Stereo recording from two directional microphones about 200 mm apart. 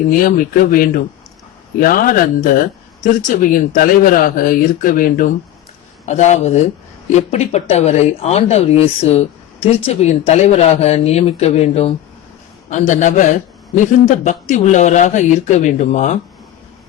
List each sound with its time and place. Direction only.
0.1 s a man's voice: 45° left (ahead or behind)